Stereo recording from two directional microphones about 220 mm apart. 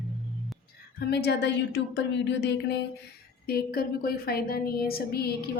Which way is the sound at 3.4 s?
45° left (ahead or behind).